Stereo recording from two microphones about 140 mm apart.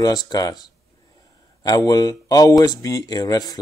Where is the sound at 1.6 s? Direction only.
25° left (ahead or behind).